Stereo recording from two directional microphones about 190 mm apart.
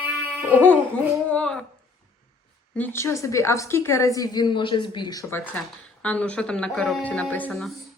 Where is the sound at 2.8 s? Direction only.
10° left (ahead or behind).